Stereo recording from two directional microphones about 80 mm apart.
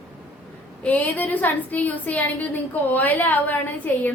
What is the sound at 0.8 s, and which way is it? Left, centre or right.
A woman's voice, centre.